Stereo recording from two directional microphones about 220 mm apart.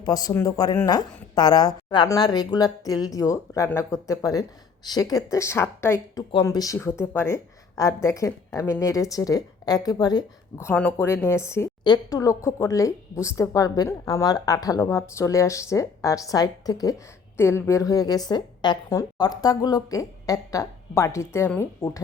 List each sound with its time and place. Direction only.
0.0 s speech: 15° left (ahead or behind)